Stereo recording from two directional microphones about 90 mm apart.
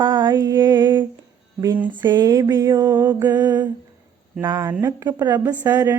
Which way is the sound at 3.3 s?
50° right (ahead or behind).